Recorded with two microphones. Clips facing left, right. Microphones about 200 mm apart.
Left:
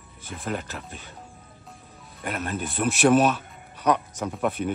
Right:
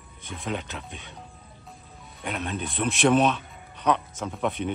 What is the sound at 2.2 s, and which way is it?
A man's voice, 5° left (ahead or behind).